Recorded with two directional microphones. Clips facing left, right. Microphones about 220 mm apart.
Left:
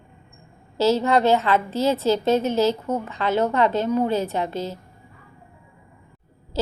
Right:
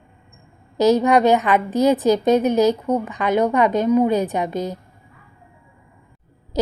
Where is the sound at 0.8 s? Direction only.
15° right (ahead or behind).